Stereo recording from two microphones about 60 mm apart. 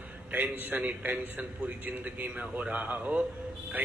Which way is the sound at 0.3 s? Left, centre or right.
Right.